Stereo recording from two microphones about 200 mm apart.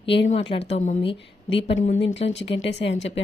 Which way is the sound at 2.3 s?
65° left (ahead or behind).